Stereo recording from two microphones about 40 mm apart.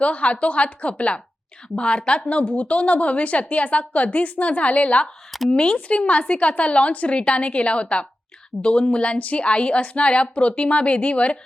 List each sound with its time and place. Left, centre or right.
0.0 s a woman's voice: left